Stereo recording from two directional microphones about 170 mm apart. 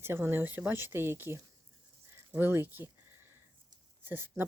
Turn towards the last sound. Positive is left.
turn(degrees=-10)  # may be behind; listen again after turning